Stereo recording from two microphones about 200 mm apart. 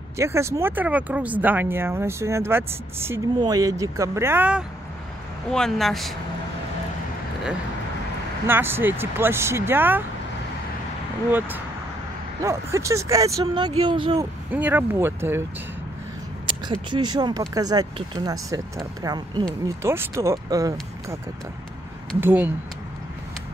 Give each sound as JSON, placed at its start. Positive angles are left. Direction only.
{"t": 0.2, "sound": "speech", "side_deg": -15}
{"t": 8.5, "sound": "speech", "side_deg": -10}
{"t": 11.2, "sound": "speech", "side_deg": -10}
{"t": 14.5, "sound": "speech", "side_deg": -10}
{"t": 16.4, "sound": "speech", "side_deg": -20}
{"t": 22.2, "sound": "speech", "side_deg": -10}